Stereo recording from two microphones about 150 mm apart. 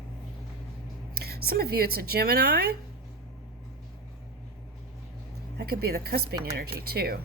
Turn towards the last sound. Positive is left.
turn(degrees=-90)